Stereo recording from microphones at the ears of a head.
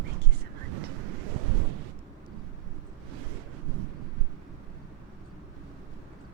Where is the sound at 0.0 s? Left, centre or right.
Right.